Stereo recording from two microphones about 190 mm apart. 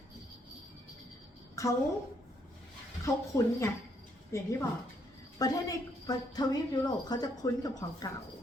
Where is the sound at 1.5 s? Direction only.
15° left (ahead or behind).